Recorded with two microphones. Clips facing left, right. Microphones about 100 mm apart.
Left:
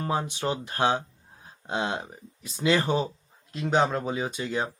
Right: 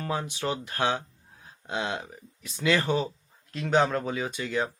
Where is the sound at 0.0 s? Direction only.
25° left (ahead or behind).